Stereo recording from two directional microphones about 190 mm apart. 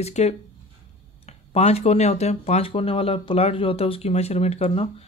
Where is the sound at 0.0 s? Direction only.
35° left (ahead or behind).